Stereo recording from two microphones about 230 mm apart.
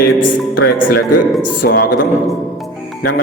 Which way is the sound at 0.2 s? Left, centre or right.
Left.